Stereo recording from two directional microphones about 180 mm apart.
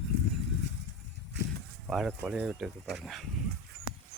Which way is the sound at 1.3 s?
70° right (ahead or behind).